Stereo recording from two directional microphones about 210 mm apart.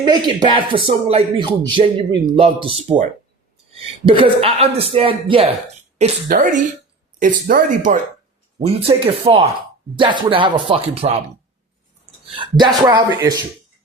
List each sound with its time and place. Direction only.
0.0 s a man's voice: 20° right (ahead or behind)
6.0 s speech: 40° right (ahead or behind)
8.6 s a man's voice: 25° right (ahead or behind)
12.4 s a man's voice: 20° right (ahead or behind)